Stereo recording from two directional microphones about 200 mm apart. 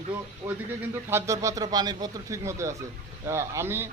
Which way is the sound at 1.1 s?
15° right (ahead or behind).